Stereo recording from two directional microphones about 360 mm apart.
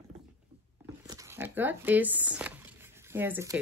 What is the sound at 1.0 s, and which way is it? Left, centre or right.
Speech, centre.